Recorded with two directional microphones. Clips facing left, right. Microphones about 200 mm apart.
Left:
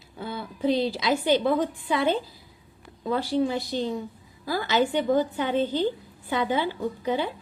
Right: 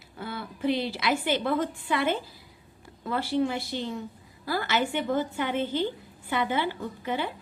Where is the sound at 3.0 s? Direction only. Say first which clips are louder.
Left 2 dB; 15° left (ahead or behind).